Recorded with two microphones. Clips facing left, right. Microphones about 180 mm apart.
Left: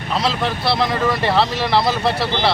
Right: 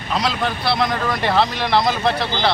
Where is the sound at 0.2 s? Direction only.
Centre (ahead or behind).